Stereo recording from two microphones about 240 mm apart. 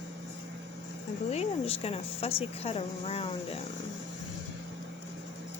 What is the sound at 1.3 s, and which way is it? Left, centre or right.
A woman's voice, left.